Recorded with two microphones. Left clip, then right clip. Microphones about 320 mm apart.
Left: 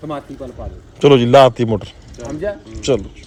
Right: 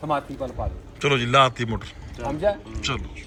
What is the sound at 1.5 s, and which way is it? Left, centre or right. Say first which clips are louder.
Speech: left 11 dB; centre.